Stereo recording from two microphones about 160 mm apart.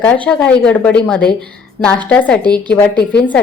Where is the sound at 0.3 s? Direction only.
5° left (ahead or behind).